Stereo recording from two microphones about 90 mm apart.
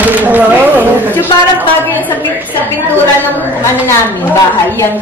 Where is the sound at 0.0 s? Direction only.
20° right (ahead or behind).